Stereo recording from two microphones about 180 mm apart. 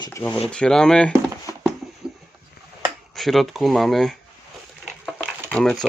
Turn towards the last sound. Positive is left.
turn(degrees=0)  # may be behind; listen again after turning